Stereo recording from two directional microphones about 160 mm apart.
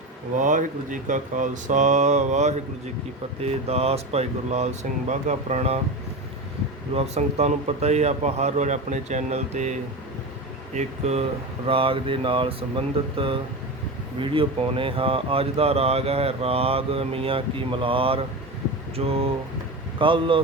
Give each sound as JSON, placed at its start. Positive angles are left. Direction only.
{"t": 0.3, "sound": "speech", "side_deg": -50}
{"t": 6.9, "sound": "speech", "side_deg": -40}
{"t": 10.8, "sound": "speech", "side_deg": -45}